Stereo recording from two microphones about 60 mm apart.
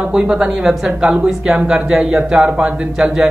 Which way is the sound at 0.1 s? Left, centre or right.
Centre.